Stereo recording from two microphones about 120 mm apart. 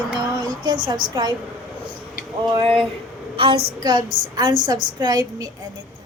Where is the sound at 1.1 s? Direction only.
30° right (ahead or behind).